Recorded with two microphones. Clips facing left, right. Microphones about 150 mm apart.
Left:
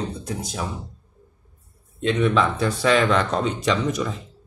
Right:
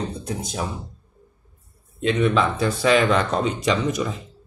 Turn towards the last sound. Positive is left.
turn(degrees=-10)  # may be behind; listen again after turning